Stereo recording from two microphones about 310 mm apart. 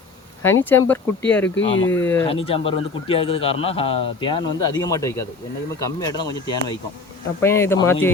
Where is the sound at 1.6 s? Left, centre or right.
Left.